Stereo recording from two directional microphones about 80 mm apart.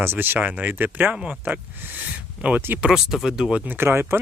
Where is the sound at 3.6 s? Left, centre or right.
Right.